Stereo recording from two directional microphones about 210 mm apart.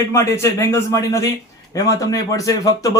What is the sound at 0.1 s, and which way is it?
Speech, 15° left (ahead or behind).